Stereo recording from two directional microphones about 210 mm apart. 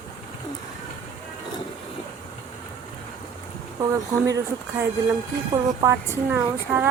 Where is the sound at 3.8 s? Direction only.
15° right (ahead or behind).